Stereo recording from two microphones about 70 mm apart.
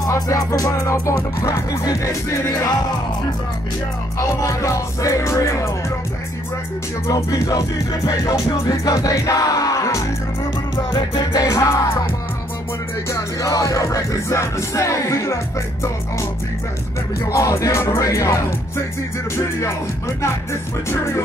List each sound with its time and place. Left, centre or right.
0.0 s music: left
4.4 s music: left
7.1 s music: left
11.5 s music: left
13.1 s music: left
17.3 s music: left
20.9 s music: left